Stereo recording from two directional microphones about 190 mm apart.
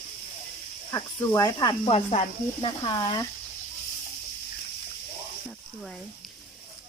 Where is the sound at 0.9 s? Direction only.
15° left (ahead or behind).